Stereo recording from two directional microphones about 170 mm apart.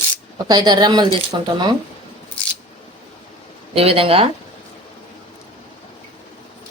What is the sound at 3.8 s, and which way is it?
Speech, 35° right (ahead or behind).